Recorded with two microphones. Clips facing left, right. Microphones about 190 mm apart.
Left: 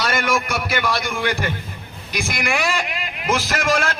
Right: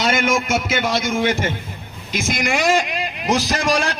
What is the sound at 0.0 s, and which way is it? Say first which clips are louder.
A man's voice: right 2 dB; 20° right (ahead or behind).